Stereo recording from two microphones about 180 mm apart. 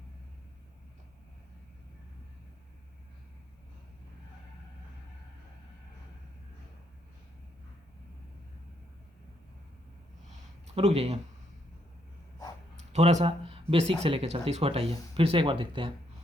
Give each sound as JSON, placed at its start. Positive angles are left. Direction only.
{"t": 10.8, "sound": "speech", "side_deg": -35}
{"t": 12.9, "sound": "speech", "side_deg": -40}